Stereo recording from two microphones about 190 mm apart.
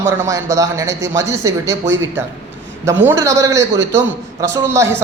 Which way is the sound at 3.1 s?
15° right (ahead or behind).